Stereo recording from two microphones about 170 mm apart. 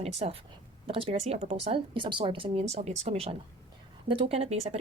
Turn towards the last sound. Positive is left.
turn(degrees=-40)  # may be behind; listen again after turning